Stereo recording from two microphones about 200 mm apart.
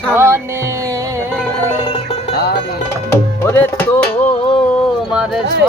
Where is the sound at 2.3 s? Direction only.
55° left (ahead or behind).